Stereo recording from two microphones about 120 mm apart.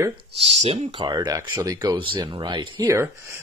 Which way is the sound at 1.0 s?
35° right (ahead or behind).